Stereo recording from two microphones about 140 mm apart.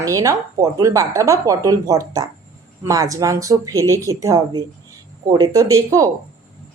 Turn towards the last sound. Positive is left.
turn(degrees=-25)  # may be behind; listen again after turning